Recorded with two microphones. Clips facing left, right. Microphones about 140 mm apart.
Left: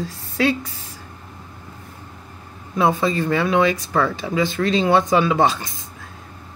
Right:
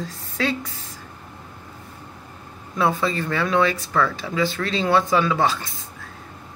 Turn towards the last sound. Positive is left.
turn(degrees=20)  # may be behind; listen again after turning